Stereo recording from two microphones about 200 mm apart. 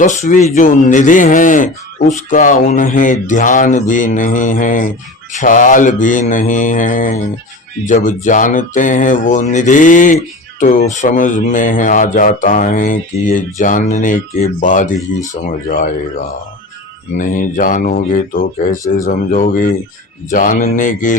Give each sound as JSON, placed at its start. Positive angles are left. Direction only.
{"t": 0.0, "sound": "speech", "side_deg": 40}
{"t": 17.2, "sound": "speech", "side_deg": 40}